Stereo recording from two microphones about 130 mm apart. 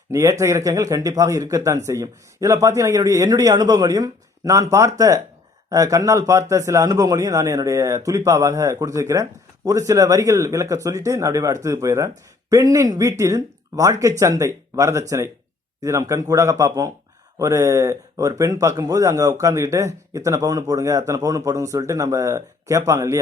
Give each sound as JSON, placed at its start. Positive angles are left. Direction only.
{"t": 0.1, "sound": "speech", "side_deg": -25}